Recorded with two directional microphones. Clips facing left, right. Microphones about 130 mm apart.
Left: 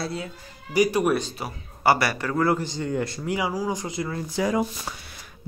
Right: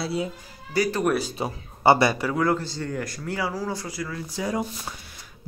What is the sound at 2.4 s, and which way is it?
Speech, 15° left (ahead or behind).